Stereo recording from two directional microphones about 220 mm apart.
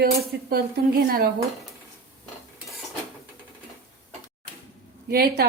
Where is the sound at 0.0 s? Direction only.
45° right (ahead or behind).